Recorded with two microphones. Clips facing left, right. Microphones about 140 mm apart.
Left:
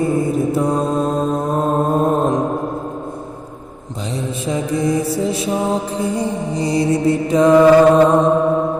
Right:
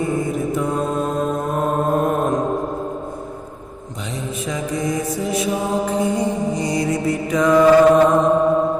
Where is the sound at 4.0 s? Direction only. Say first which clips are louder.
Left 4 dB; 30° left (ahead or behind).